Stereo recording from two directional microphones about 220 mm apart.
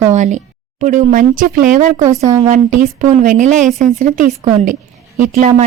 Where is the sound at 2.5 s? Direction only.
35° right (ahead or behind).